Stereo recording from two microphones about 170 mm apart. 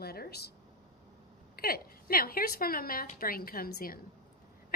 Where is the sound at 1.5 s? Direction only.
60° left (ahead or behind).